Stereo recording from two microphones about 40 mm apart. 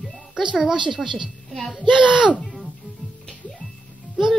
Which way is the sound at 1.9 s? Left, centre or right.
Right.